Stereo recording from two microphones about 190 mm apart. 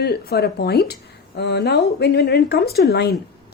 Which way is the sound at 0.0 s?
55° left (ahead or behind).